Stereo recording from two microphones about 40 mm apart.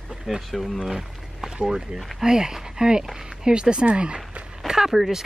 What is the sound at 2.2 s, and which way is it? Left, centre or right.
Speech, centre.